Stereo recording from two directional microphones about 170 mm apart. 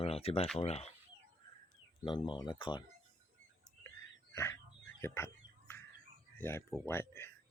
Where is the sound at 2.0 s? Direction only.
25° left (ahead or behind).